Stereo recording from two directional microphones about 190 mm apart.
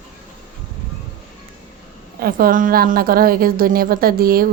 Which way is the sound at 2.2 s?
50° right (ahead or behind).